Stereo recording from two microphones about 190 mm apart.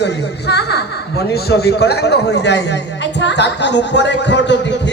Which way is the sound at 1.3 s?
55° left (ahead or behind).